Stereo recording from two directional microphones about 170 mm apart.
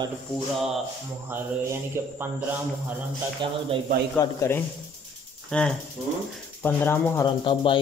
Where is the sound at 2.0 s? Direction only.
15° right (ahead or behind).